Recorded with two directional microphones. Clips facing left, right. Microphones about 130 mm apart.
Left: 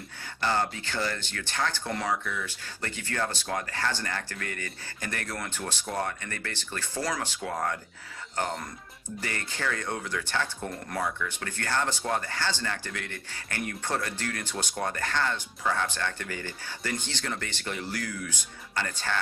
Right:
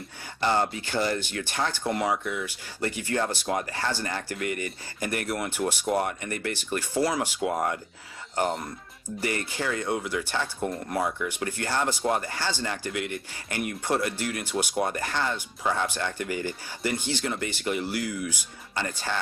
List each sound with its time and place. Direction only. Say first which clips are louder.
0.4 s speech: right 3 dB; 20° right (ahead or behind)
9.2 s speech: right 4 dB; 15° right (ahead or behind)